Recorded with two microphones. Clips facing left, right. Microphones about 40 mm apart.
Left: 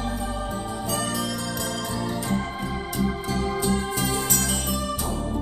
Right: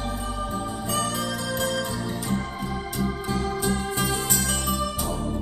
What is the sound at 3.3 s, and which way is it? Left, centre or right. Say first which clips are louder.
Music: even; right.